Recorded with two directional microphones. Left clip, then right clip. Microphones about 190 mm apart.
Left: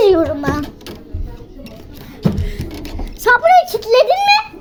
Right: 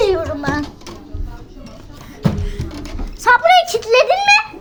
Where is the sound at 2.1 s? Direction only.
45° left (ahead or behind).